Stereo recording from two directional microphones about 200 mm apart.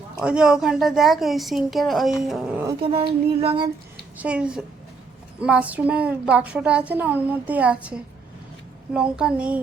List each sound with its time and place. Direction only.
0.2 s a woman's voice: 5° right (ahead or behind)
2.6 s speech: 25° right (ahead or behind)
4.2 s a woman's voice: 5° right (ahead or behind)